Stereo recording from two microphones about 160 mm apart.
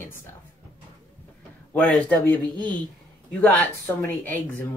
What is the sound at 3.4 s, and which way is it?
Speech, 10° left (ahead or behind).